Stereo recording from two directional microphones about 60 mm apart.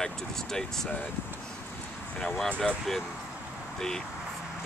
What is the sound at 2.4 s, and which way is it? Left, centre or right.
Speech, left.